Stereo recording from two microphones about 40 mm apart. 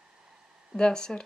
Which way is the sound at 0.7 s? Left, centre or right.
Centre.